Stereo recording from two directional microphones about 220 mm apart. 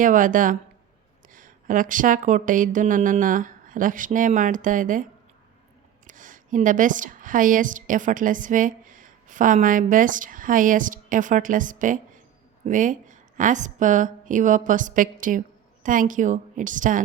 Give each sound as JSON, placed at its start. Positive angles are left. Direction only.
{"t": 0.0, "sound": "speech", "side_deg": -35}
{"t": 6.1, "sound": "a woman's voice", "side_deg": -35}